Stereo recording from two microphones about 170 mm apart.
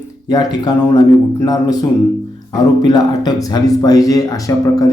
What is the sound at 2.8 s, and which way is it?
Speech, 25° left (ahead or behind).